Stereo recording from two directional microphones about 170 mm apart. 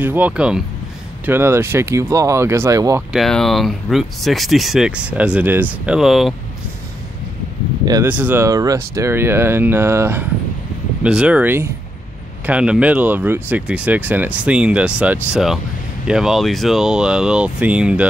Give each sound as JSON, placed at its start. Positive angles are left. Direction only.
{"t": 0.0, "sound": "speech", "side_deg": -10}
{"t": 3.1, "sound": "speech", "side_deg": 0}
{"t": 7.8, "sound": "speech", "side_deg": -20}
{"t": 8.1, "sound": "speech", "side_deg": -10}